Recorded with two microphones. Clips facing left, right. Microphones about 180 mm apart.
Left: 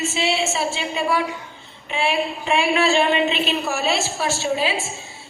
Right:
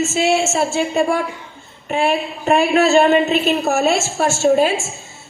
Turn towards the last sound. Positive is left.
turn(degrees=-45)  # may be behind; listen again after turning